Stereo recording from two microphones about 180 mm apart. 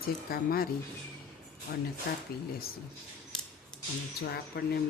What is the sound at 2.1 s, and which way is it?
Speech, 55° left (ahead or behind).